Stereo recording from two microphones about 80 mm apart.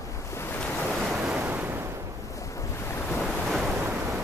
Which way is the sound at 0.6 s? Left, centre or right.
Centre.